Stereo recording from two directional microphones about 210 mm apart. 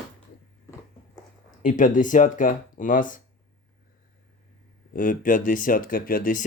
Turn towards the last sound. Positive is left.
turn(degrees=40)  # may be behind; listen again after turning